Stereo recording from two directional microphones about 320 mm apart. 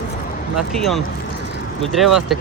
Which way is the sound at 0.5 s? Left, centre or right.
Centre.